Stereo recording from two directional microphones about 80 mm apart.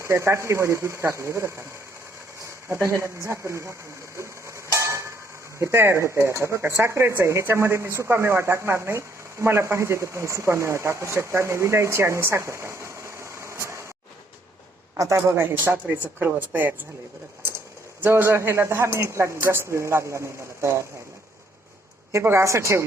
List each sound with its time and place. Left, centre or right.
0.0 s speech: right
4.2 s a sound: right
5.5 s speech: right
14.9 s speech: right
18.0 s speech: right
22.1 s speech: right